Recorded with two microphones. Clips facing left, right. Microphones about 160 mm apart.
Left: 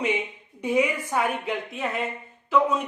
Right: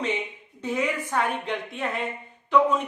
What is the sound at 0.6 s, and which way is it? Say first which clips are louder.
A woman's voice: left 3 dB; 10° left (ahead or behind).